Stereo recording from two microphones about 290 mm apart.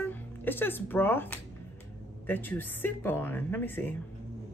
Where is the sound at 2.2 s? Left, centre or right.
Centre.